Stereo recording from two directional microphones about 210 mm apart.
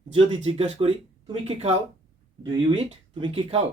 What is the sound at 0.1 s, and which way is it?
Speech, 25° right (ahead or behind).